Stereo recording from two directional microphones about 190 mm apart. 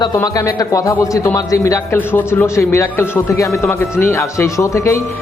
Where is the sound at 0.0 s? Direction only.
20° left (ahead or behind).